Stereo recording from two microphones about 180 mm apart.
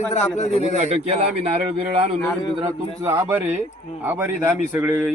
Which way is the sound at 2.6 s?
15° right (ahead or behind).